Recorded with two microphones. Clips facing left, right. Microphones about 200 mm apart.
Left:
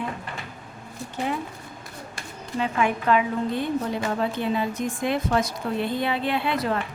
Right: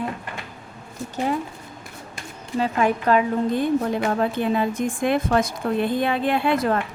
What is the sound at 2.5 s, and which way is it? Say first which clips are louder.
A woman's voice: right 3 dB; 40° right (ahead or behind).